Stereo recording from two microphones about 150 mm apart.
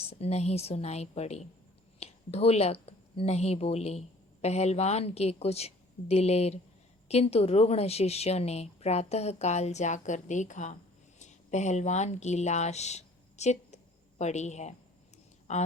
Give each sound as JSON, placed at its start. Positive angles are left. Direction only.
{"t": 0.1, "sound": "a woman's voice", "side_deg": 45}